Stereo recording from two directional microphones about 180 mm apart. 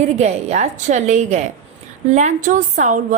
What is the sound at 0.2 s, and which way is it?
Speech, 40° right (ahead or behind).